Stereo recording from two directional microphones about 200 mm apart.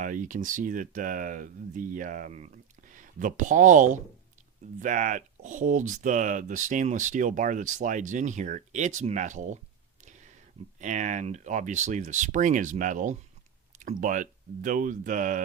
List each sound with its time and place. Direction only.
0.0 s speech: 40° right (ahead or behind)
10.0 s a sound: 40° right (ahead or behind)
10.8 s speech: 40° right (ahead or behind)